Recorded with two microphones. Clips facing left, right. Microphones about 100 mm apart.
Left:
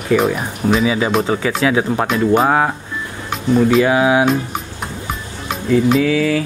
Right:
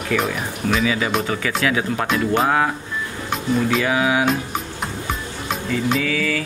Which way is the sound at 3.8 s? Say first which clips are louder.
Left 5 dB; 25° left (ahead or behind).